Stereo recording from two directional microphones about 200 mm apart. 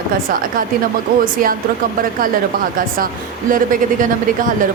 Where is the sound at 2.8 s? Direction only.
45° right (ahead or behind).